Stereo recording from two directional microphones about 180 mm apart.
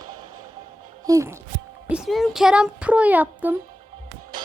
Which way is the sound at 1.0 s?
15° right (ahead or behind).